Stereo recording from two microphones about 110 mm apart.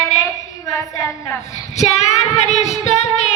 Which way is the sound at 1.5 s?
90° left.